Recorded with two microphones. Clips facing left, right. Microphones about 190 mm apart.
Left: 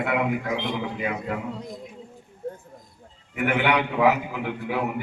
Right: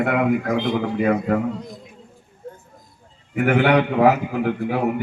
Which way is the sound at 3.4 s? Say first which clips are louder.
Right 6 dB; 50° right (ahead or behind).